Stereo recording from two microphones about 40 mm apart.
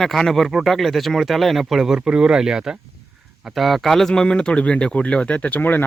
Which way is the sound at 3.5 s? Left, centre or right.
Centre.